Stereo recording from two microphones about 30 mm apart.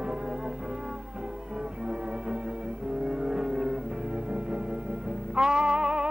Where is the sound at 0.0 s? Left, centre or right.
Right.